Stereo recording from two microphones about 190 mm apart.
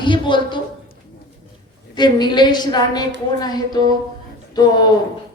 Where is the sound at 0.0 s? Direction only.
25° left (ahead or behind).